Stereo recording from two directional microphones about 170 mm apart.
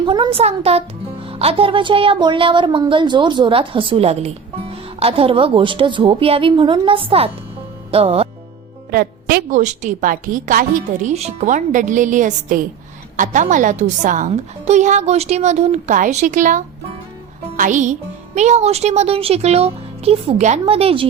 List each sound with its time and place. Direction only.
0.0 s speech: 30° right (ahead or behind)
7.9 s music: 35° right (ahead or behind)
8.9 s a woman's voice: 65° right (ahead or behind)
9.6 s a woman's voice: 45° right (ahead or behind)
17.4 s music: 45° right (ahead or behind)
18.3 s speech: 40° right (ahead or behind)